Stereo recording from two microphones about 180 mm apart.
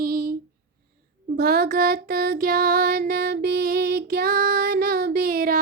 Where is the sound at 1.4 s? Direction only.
60° right (ahead or behind).